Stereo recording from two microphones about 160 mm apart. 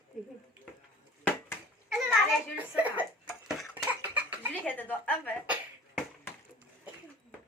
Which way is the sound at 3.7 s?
10° right (ahead or behind).